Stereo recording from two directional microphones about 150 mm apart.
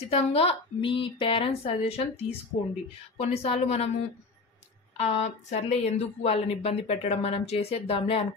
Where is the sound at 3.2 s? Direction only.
45° left (ahead or behind).